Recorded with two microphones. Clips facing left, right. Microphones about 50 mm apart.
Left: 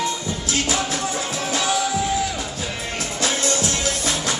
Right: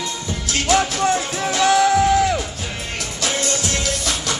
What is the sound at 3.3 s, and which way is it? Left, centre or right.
Music, right.